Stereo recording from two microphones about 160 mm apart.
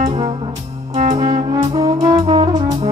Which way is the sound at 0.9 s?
50° right (ahead or behind).